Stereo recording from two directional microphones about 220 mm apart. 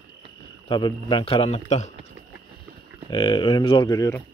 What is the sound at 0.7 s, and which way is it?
A man's voice, 20° left (ahead or behind).